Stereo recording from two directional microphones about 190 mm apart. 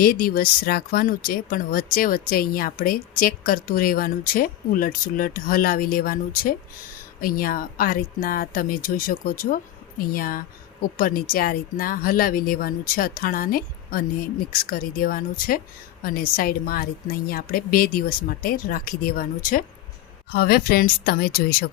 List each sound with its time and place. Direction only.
0.0 s speech: 50° left (ahead or behind)